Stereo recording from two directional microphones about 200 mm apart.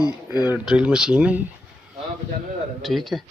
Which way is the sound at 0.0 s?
20° left (ahead or behind).